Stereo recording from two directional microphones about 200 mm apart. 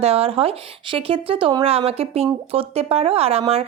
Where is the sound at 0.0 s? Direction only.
30° right (ahead or behind).